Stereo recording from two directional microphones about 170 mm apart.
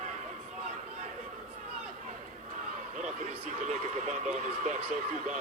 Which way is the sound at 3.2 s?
45° right (ahead or behind).